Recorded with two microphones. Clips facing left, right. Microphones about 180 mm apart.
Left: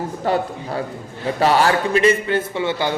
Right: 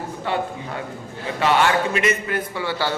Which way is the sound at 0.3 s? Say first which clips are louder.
Left 4 dB; 40° left (ahead or behind).